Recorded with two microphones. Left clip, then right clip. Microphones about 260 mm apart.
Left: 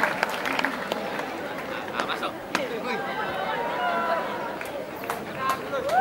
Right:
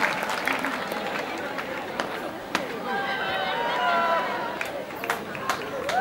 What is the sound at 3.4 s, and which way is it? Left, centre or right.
Run, centre.